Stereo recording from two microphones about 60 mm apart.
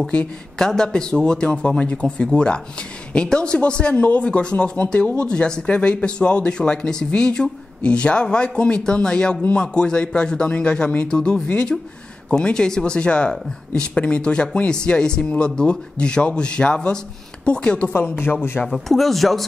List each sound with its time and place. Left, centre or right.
0.1 s a woman's voice: centre
18.2 s speech: left
18.7 s speech: centre